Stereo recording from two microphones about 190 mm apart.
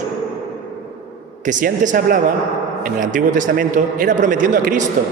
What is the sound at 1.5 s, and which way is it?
A man's voice, 40° right (ahead or behind).